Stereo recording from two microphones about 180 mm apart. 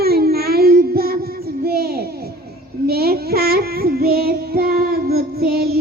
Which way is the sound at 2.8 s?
60° right (ahead or behind).